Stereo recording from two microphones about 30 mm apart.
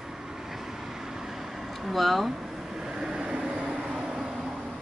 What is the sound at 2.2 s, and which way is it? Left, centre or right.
Vehicle, centre.